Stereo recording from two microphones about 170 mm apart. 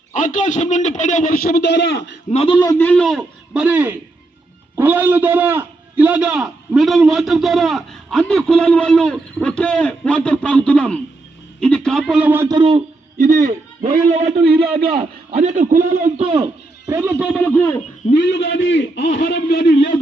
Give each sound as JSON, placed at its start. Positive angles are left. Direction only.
{"t": 0.1, "sound": "a man's voice", "side_deg": 50}
{"t": 2.3, "sound": "a man's voice", "side_deg": 30}
{"t": 2.7, "sound": "a man's voice", "side_deg": 10}
{"t": 12.5, "sound": "a man's voice", "side_deg": -30}
{"t": 13.1, "sound": "a man's voice", "side_deg": -50}
{"t": 14.4, "sound": "a man's voice", "side_deg": -65}
{"t": 15.4, "sound": "a man's voice", "side_deg": -45}
{"t": 16.4, "sound": "speech", "side_deg": -15}
{"t": 17.2, "sound": "a man's voice", "side_deg": 10}
{"t": 18.3, "sound": "a man's voice", "side_deg": 90}